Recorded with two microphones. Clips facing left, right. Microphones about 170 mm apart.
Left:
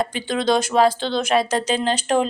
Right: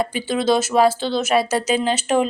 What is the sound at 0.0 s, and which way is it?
A woman's voice, 5° right (ahead or behind).